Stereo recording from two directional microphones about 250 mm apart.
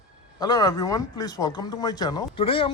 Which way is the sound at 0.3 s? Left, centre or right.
Centre.